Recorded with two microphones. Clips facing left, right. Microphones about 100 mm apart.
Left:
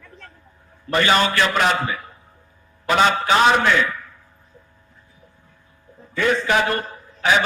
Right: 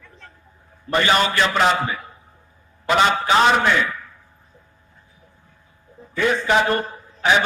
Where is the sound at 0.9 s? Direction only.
25° right (ahead or behind).